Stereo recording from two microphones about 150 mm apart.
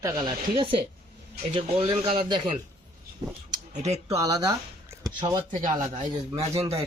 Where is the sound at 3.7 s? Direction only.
50° right (ahead or behind).